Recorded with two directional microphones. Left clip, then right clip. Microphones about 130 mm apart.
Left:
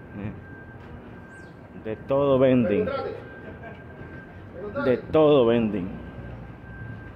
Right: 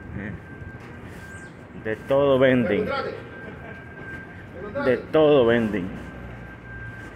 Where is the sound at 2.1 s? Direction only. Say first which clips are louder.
Right 2 dB; 35° left (ahead or behind).